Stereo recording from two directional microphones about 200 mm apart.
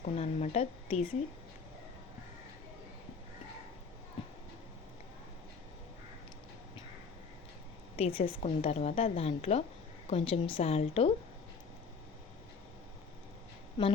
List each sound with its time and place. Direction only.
0.0 s a woman's voice: 35° left (ahead or behind)
7.9 s a woman's voice: 30° left (ahead or behind)